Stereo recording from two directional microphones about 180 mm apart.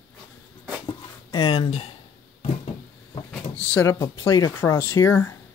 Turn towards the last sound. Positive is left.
turn(degrees=15)  # may be behind; listen again after turning